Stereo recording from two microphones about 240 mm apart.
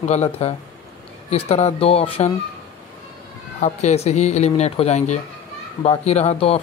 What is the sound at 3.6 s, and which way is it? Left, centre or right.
Speech, left.